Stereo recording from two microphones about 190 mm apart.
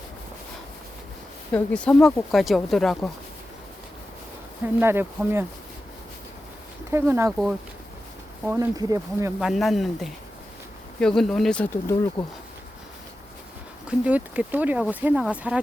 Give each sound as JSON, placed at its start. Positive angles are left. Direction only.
{"t": 1.5, "sound": "speech", "side_deg": 5}
{"t": 4.8, "sound": "speech", "side_deg": -10}
{"t": 6.9, "sound": "speech", "side_deg": -15}
{"t": 8.4, "sound": "speech", "side_deg": -15}
{"t": 9.4, "sound": "speech", "side_deg": 0}
{"t": 13.8, "sound": "speech", "side_deg": -5}